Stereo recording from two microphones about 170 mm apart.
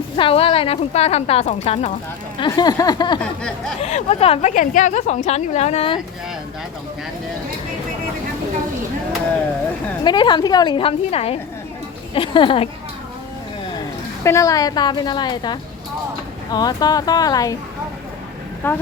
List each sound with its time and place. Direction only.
0.2 s speech: 30° left (ahead or behind)
2.4 s a woman's voice: 25° left (ahead or behind)
3.8 s speech: 40° left (ahead or behind)
4.5 s a woman's voice: 50° left (ahead or behind)
10.0 s a woman's voice: 25° left (ahead or behind)
14.3 s a woman's voice: 20° left (ahead or behind)
18.6 s speech: 10° left (ahead or behind)